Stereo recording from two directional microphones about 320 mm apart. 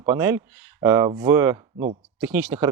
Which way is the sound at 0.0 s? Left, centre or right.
Centre.